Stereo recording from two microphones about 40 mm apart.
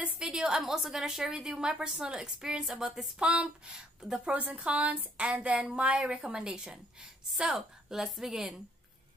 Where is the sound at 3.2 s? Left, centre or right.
Right.